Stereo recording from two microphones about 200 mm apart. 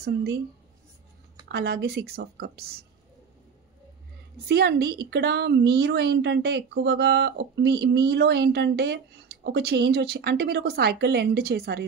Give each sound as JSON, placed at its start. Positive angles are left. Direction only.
{"t": 0.0, "sound": "a woman's voice", "side_deg": -55}
{"t": 1.5, "sound": "a woman's voice", "side_deg": -55}
{"t": 4.5, "sound": "a woman's voice", "side_deg": -55}